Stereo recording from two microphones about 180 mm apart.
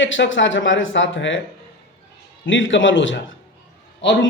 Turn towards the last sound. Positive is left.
turn(degrees=80)